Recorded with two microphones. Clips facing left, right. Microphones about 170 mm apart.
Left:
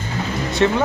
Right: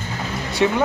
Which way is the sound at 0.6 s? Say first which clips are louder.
Left 1 dB; 10° right (ahead or behind).